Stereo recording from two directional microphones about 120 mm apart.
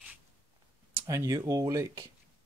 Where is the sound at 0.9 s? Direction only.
25° right (ahead or behind).